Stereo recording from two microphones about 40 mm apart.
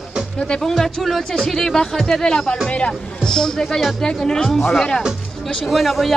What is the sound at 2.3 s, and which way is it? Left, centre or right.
Speech, centre.